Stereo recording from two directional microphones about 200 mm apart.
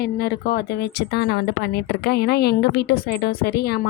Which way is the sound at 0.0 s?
50° left (ahead or behind).